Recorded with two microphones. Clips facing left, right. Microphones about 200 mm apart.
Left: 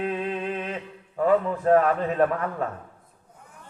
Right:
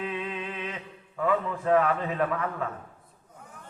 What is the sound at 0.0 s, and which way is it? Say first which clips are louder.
Music: left 5 dB; 40° left (ahead or behind).